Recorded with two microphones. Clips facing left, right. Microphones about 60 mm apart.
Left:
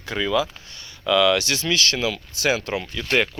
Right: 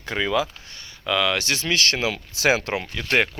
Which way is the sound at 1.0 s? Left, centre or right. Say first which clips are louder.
Left 4 dB; right.